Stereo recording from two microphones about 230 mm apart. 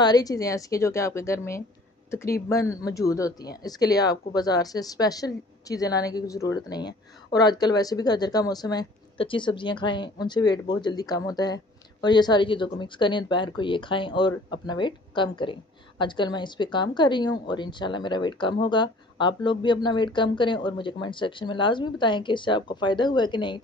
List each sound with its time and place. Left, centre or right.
0.0 s a woman's voice: centre